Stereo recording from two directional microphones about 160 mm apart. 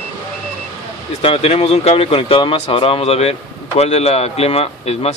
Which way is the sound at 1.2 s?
35° left (ahead or behind).